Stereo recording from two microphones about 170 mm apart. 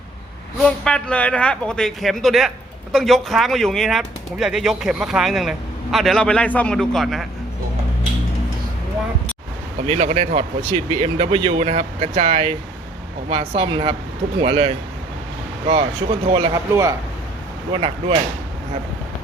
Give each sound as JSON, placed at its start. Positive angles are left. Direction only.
{"t": 0.6, "sound": "speech", "side_deg": 5}
{"t": 9.8, "sound": "speech", "side_deg": -35}
{"t": 17.7, "sound": "speech", "side_deg": -30}